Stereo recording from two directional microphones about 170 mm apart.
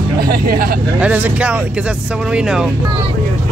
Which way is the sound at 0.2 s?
60° right (ahead or behind).